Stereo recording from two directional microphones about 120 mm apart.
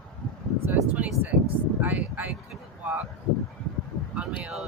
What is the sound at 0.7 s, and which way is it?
Speech, 15° right (ahead or behind).